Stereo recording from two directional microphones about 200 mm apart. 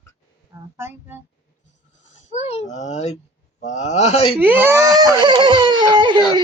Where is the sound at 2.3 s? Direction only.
35° left (ahead or behind).